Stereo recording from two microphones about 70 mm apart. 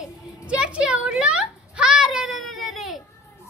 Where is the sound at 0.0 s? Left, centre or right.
Centre.